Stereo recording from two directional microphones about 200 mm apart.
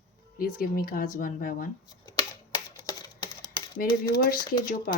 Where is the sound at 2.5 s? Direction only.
20° left (ahead or behind).